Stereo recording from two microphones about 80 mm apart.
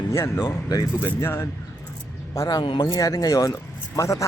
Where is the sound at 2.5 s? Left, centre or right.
Left.